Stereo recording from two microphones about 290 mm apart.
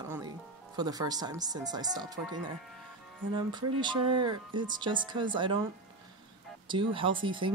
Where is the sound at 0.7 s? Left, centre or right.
Centre.